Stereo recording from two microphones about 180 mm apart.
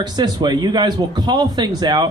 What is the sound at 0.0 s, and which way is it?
A man's voice, 25° right (ahead or behind).